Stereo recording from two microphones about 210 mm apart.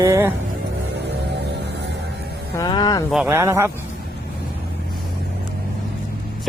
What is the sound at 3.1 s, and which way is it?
Speech, 10° right (ahead or behind).